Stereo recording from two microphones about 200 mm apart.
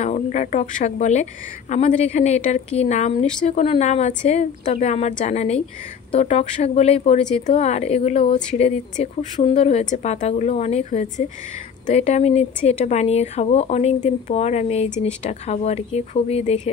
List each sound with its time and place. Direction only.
0.0 s speech: 35° left (ahead or behind)